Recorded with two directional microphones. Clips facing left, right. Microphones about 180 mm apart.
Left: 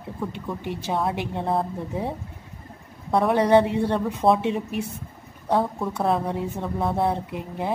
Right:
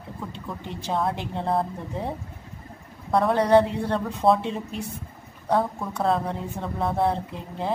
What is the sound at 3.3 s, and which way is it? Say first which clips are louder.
A woman's voice: left 1 dB; 15° left (ahead or behind).